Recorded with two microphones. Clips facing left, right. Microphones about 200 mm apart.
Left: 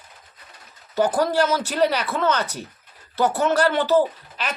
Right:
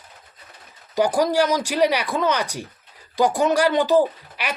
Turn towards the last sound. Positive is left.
turn(degrees=-10)  # may be behind; listen again after turning